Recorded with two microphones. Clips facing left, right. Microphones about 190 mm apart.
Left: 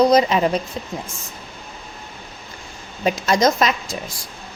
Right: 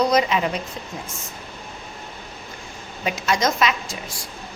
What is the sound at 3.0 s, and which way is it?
Speech, 40° left (ahead or behind).